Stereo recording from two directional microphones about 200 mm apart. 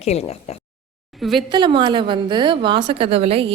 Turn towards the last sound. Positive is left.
turn(degrees=-30)  # may be behind; listen again after turning